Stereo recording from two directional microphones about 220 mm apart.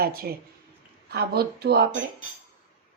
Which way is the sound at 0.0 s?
45° right (ahead or behind).